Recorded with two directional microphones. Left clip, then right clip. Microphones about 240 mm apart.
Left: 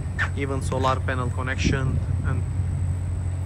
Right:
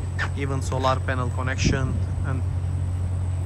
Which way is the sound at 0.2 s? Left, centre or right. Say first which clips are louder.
Left 2 dB; centre.